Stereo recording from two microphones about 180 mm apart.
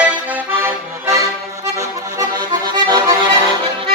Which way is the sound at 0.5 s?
15° right (ahead or behind).